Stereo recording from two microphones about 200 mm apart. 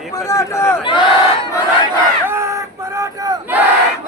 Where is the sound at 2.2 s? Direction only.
10° right (ahead or behind).